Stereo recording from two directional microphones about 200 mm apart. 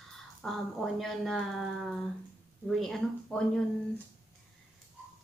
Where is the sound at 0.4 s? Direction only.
Centre (ahead or behind).